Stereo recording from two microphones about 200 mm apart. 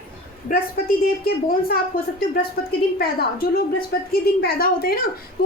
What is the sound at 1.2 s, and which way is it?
A woman's voice, 50° left (ahead or behind).